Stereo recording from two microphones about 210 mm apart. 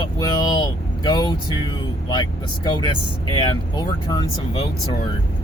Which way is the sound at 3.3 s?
20° left (ahead or behind).